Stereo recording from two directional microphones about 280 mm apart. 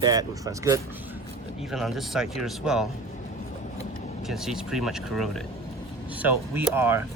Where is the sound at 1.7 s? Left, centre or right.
Centre.